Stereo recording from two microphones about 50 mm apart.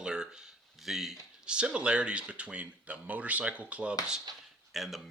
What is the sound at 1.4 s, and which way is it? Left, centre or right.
Speech, centre.